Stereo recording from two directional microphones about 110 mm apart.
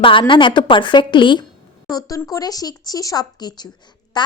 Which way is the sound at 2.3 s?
35° left (ahead or behind).